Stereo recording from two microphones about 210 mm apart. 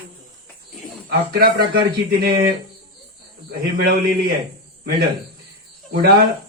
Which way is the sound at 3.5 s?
45° right (ahead or behind).